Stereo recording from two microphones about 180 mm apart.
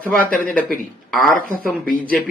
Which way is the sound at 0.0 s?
10° left (ahead or behind).